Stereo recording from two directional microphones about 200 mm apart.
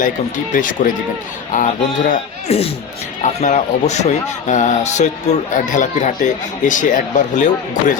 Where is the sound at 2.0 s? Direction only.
30° left (ahead or behind).